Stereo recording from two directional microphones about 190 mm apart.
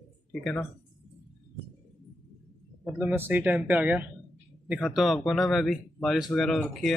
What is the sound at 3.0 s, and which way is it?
Speech, 10° right (ahead or behind).